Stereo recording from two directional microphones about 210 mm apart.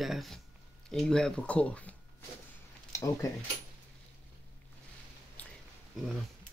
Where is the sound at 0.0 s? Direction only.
Centre (ahead or behind); by 3.3 s 15° left (ahead or behind).